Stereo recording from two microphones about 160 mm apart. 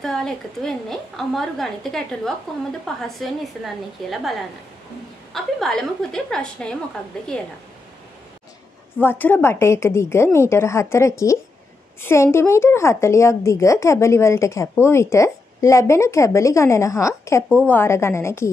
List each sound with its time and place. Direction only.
0.0 s a woman's voice: centre (ahead or behind)
5.3 s a woman's voice: 5° left (ahead or behind)
9.0 s a woman's voice: 15° left (ahead or behind)